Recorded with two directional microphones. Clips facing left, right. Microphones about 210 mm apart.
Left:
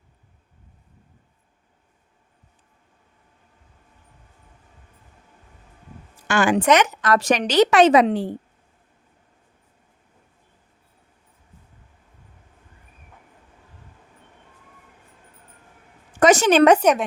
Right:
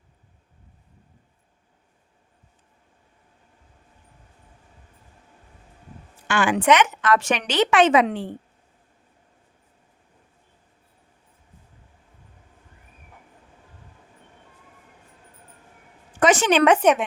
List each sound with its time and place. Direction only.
6.2 s a woman's voice: 40° left (ahead or behind)
16.2 s speech: 40° left (ahead or behind)